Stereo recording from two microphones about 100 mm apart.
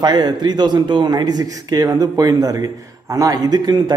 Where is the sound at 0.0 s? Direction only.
45° right (ahead or behind).